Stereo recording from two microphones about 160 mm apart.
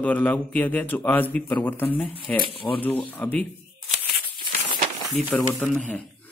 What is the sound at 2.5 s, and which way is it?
Speech, 35° left (ahead or behind).